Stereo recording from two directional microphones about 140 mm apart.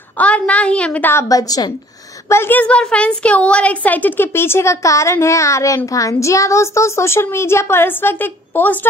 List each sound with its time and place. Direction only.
0.2 s a woman's voice: 10° left (ahead or behind)
1.3 s a woman's voice: 25° left (ahead or behind)